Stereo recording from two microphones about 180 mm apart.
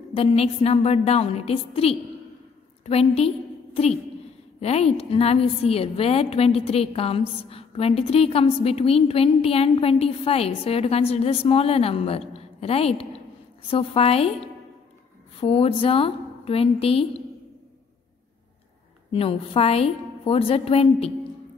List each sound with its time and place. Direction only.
0.1 s a woman's voice: 30° left (ahead or behind)
19.1 s a woman's voice: 30° left (ahead or behind)